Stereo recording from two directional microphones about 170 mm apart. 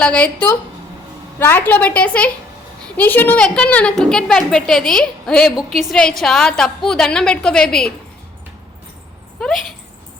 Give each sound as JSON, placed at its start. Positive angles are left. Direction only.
{"t": 0.0, "sound": "a woman's voice", "side_deg": 5}
{"t": 9.4, "sound": "a woman's voice", "side_deg": 0}